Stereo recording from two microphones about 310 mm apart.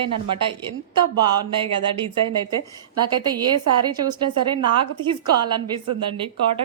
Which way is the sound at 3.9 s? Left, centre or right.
Centre.